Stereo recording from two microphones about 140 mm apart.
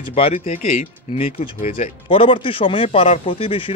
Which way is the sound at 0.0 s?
45° left (ahead or behind).